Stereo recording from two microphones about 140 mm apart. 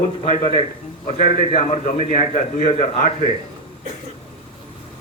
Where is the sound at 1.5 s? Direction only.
50° left (ahead or behind).